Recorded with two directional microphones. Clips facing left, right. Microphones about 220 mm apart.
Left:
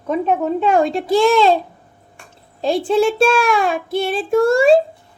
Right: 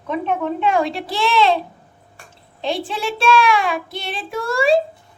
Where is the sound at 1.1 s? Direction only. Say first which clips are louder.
Left 5 dB; 45° left (ahead or behind).